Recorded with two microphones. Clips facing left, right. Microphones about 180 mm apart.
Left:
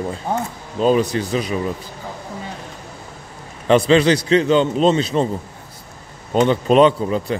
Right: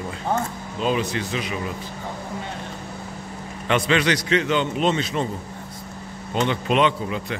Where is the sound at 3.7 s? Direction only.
30° left (ahead or behind).